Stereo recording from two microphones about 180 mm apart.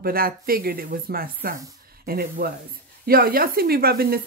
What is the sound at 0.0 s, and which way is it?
Speech, 55° right (ahead or behind).